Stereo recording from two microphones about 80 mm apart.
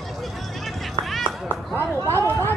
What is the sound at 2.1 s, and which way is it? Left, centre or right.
Chatter, left.